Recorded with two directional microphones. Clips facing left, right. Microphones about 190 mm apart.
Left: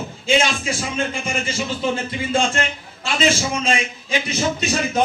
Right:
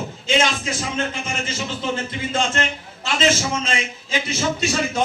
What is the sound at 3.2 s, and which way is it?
Speech, 10° left (ahead or behind).